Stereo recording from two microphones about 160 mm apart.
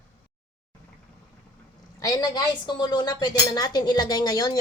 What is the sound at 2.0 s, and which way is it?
A woman's voice, 25° left (ahead or behind).